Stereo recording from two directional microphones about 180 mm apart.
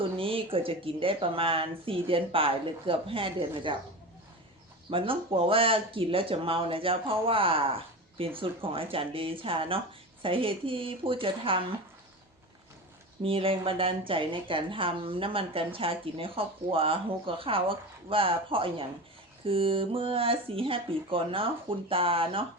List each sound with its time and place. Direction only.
0.2 s speech: 30° right (ahead or behind)
4.9 s speech: 30° right (ahead or behind)
13.2 s speech: 30° right (ahead or behind)